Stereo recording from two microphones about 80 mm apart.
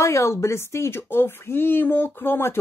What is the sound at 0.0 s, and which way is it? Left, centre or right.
Speech, left.